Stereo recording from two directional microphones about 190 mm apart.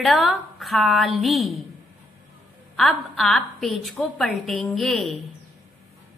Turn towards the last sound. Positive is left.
turn(degrees=0)  # may be behind; listen again after turning